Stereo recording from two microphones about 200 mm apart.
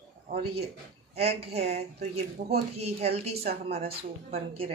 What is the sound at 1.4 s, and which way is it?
Speech, 30° right (ahead or behind).